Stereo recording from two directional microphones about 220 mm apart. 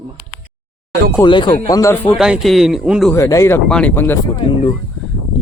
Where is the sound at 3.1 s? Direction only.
15° left (ahead or behind).